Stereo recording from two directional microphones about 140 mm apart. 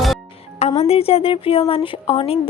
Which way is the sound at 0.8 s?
45° left (ahead or behind).